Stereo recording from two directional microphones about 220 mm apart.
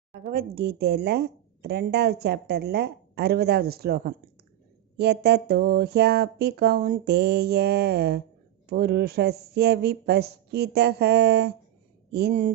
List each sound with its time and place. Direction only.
0.3 s a woman's voice: 45° right (ahead or behind)